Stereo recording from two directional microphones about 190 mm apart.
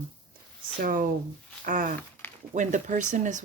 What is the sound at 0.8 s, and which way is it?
Speech, 45° right (ahead or behind).